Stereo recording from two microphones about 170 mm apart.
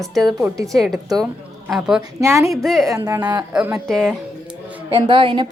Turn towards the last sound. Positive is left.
turn(degrees=-30)  # may be behind; listen again after turning